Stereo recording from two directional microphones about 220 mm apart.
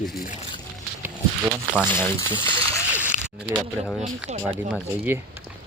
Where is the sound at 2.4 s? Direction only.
10° left (ahead or behind).